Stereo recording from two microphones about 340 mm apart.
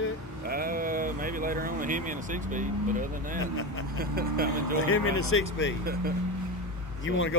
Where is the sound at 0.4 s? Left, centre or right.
Right.